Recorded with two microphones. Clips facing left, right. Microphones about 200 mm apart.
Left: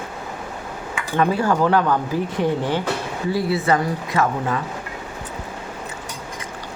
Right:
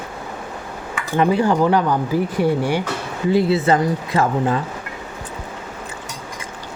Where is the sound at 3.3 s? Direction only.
25° right (ahead or behind).